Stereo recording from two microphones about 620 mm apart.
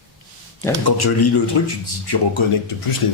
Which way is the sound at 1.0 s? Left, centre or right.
Left.